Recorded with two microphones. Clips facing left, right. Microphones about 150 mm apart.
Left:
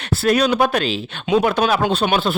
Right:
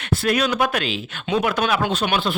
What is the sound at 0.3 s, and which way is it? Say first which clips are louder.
Speech: left 5 dB; 35° left (ahead or behind).